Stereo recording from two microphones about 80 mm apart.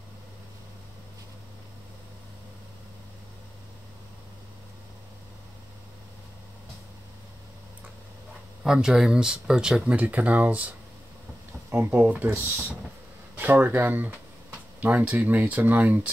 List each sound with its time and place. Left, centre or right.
8.6 s speech: centre
11.8 s speech: right